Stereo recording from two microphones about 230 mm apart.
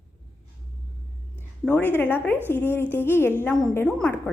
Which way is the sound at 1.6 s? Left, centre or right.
Centre.